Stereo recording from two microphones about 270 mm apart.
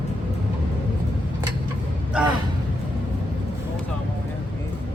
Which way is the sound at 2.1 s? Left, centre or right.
Centre.